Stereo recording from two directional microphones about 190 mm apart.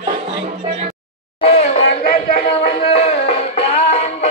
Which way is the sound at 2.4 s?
30° left (ahead or behind).